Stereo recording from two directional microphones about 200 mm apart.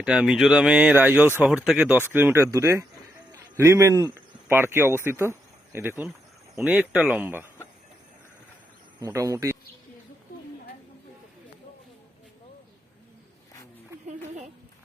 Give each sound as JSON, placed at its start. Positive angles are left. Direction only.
{"t": 0.0, "sound": "speech", "side_deg": -5}
{"t": 9.0, "sound": "speech", "side_deg": -15}